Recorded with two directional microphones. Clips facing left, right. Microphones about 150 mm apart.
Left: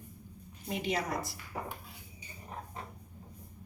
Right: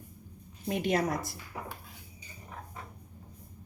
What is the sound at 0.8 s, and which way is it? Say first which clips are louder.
Speech: right 4 dB; 50° right (ahead or behind).